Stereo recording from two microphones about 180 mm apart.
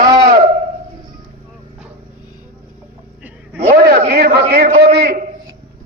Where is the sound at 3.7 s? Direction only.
60° right (ahead or behind).